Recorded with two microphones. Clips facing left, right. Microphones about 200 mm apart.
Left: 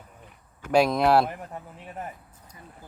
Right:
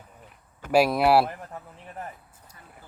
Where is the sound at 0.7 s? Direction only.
5° right (ahead or behind).